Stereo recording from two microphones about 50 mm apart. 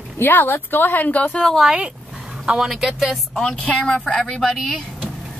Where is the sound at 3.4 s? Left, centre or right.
Centre.